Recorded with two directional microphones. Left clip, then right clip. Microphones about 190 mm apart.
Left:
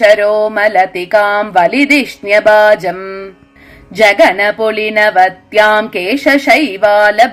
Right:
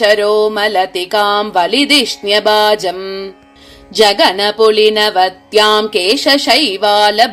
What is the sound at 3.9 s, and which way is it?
A woman's voice, 30° right (ahead or behind).